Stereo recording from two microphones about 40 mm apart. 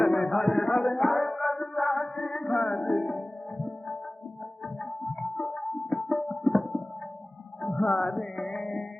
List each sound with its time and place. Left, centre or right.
0.0 s a sound: centre
1.0 s music: centre
3.6 s music: centre
5.5 s music: centre
7.6 s music: left
8.0 s music: centre